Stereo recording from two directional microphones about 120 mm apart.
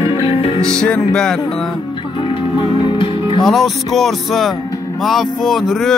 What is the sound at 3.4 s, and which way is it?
Music, centre (ahead or behind).